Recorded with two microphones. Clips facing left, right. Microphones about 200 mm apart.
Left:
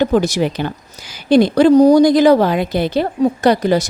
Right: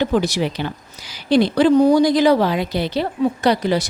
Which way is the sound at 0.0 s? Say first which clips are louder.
Left 4 dB; 45° left (ahead or behind).